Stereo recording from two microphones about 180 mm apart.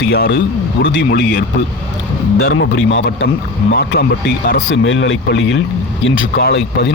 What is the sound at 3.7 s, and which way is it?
Speech, 65° left (ahead or behind).